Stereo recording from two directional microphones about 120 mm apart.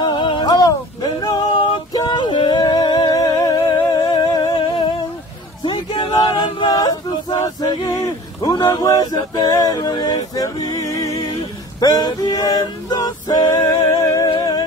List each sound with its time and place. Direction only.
0.0 s male singing: 40° left (ahead or behind)
4.6 s humming: 45° left (ahead or behind)
5.6 s male singing: 40° left (ahead or behind)
8.5 s a sound: 35° left (ahead or behind)
10.3 s music: 30° left (ahead or behind)
11.3 s a sound: 35° left (ahead or behind)
12.9 s male singing: 30° left (ahead or behind)
13.7 s music: 30° left (ahead or behind)